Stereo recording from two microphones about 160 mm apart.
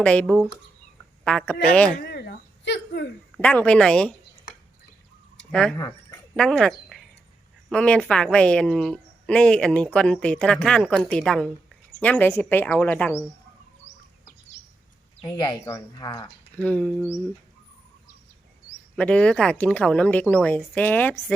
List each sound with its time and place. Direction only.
0.0 s speech: 5° left (ahead or behind)
2.0 s a sound: 90° left
3.3 s speech: 5° left (ahead or behind)
5.5 s speech: 5° left (ahead or behind)
5.7 s speech: 20° left (ahead or behind)
6.3 s a woman's voice: 5° left (ahead or behind)
15.2 s speech: 25° left (ahead or behind)
16.6 s speech: 10° left (ahead or behind)
18.9 s speech: 10° left (ahead or behind)